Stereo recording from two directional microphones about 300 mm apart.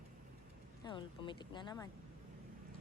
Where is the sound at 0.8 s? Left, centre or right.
Centre.